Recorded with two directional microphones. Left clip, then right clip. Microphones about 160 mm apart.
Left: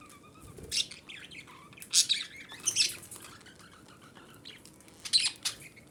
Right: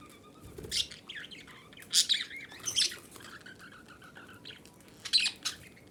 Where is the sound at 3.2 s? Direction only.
Centre (ahead or behind).